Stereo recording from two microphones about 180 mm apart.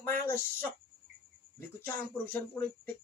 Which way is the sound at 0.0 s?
10° left (ahead or behind).